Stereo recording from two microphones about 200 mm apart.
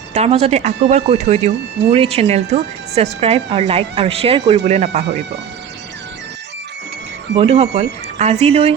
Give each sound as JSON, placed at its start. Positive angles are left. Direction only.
{"t": 0.1, "sound": "speech", "side_deg": -30}
{"t": 7.3, "sound": "speech", "side_deg": -30}